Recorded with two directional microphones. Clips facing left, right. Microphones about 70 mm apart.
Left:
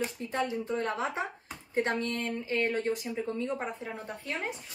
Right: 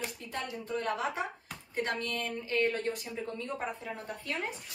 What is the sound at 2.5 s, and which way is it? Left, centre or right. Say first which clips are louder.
A woman's voice: left 1 dB; left.